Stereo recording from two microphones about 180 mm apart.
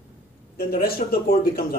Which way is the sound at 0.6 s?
60° left (ahead or behind).